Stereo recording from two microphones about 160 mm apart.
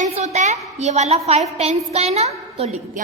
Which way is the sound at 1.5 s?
40° right (ahead or behind).